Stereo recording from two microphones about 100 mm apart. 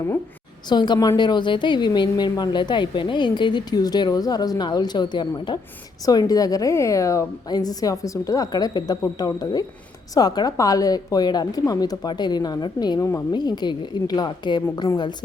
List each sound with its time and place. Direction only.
0.7 s a woman's voice: 45° left (ahead or behind)
6.1 s a woman's voice: 40° left (ahead or behind)
13.0 s a woman's voice: 30° left (ahead or behind)
13.3 s a woman's voice: 45° left (ahead or behind)